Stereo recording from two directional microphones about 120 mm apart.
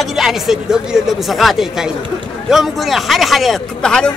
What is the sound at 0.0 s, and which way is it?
Speech, centre (ahead or behind).